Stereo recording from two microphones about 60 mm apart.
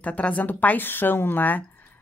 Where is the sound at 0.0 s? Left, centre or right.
Left.